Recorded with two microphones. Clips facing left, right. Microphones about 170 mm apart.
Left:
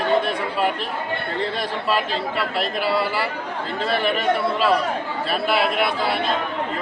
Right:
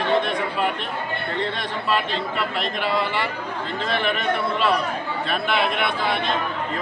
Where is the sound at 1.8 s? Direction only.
5° left (ahead or behind).